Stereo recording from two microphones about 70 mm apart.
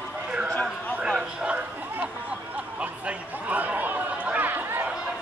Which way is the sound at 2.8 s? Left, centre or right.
Centre.